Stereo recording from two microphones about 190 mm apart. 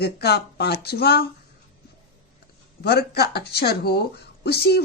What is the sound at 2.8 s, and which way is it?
A woman's voice, 55° left (ahead or behind).